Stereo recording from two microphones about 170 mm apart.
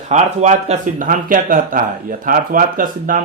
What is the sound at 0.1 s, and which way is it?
Speech, 45° right (ahead or behind).